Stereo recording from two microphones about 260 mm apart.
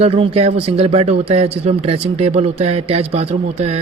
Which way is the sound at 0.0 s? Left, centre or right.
Right.